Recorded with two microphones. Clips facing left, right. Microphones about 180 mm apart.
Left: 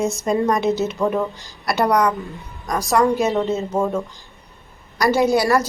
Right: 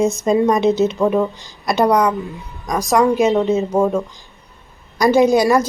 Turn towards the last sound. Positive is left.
turn(degrees=-20)  # may be behind; listen again after turning